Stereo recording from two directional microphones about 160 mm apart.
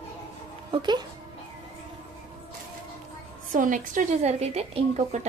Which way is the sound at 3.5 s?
55° right (ahead or behind).